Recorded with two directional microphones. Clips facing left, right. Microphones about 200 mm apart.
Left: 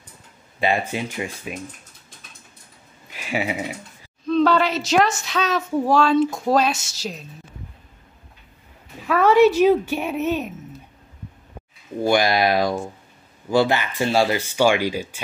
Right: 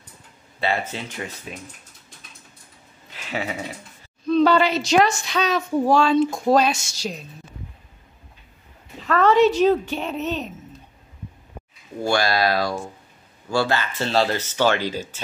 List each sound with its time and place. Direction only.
0.6 s speech: 15° left (ahead or behind)
3.1 s a sound: 10° left (ahead or behind)
4.3 s a woman's voice: centre (ahead or behind)
9.0 s speech: 10° left (ahead or behind)
12.0 s speech: 15° left (ahead or behind)